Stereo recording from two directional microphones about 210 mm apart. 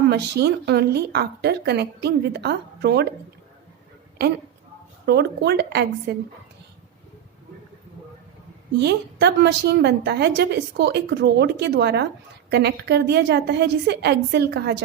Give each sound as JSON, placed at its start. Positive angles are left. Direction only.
{"t": 0.1, "sound": "a woman's voice", "side_deg": -50}
{"t": 5.0, "sound": "a woman's voice", "side_deg": -55}
{"t": 8.8, "sound": "a woman's voice", "side_deg": -50}